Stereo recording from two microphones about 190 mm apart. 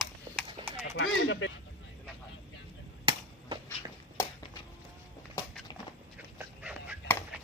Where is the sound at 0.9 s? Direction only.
80° left.